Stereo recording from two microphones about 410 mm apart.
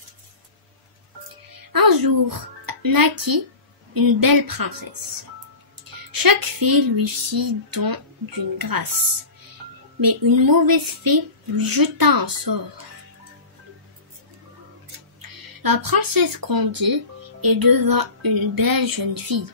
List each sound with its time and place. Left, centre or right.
1.7 s speech: right
6.1 s speech: right
9.9 s speech: right
15.2 s speech: right